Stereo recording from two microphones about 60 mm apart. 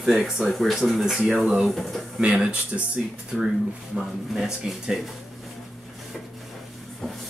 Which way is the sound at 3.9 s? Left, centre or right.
Centre.